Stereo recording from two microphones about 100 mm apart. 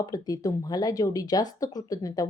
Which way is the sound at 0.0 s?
40° left (ahead or behind).